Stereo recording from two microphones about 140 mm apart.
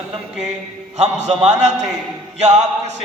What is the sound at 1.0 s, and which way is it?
Speech, 55° right (ahead or behind).